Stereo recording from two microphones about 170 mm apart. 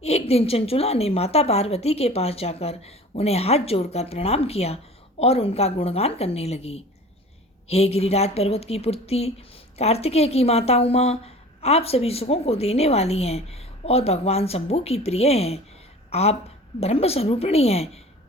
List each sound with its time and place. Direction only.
0.0 s a woman's voice: 35° left (ahead or behind)